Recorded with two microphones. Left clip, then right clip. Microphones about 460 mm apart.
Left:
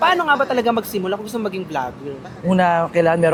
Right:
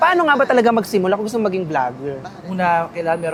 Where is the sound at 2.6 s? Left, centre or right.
Left.